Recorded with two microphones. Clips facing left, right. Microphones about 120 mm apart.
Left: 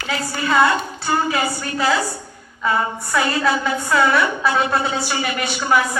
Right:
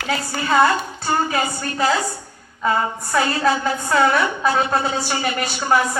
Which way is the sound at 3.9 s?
40° right (ahead or behind).